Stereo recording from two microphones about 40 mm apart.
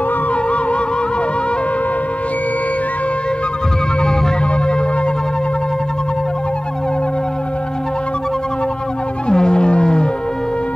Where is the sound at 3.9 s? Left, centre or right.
Centre.